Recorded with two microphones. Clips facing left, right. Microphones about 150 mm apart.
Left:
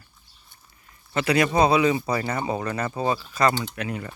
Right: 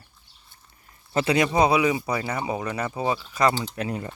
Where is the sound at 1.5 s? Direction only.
15° right (ahead or behind).